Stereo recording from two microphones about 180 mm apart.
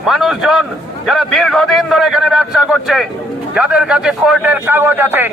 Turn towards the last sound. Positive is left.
turn(degrees=-10)  # may be behind; listen again after turning